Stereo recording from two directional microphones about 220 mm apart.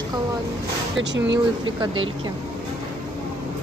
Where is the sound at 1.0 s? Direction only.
55° right (ahead or behind).